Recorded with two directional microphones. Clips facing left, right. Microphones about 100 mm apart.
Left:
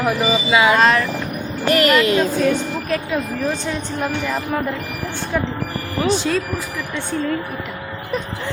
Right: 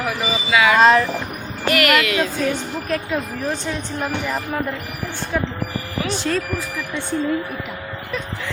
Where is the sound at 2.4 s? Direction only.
Centre (ahead or behind).